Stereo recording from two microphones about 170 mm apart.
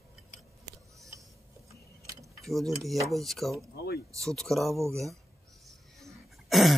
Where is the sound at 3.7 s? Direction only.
65° left (ahead or behind).